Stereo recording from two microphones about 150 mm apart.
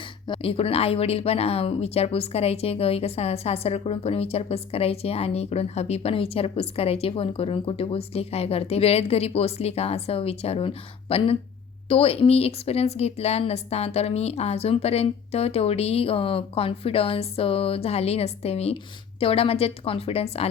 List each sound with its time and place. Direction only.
0.3 s speech: 40° left (ahead or behind)